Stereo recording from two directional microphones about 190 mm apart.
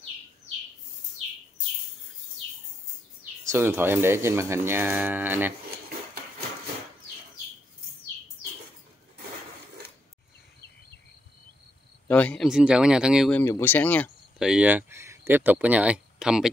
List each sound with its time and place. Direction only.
3.4 s speech: 10° right (ahead or behind)
12.1 s speech: 5° left (ahead or behind)
12.4 s speech: 5° right (ahead or behind)
13.3 s speech: 10° left (ahead or behind)
14.4 s speech: 5° right (ahead or behind)